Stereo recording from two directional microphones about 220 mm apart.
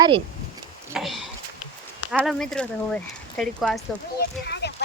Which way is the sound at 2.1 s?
Centre (ahead or behind).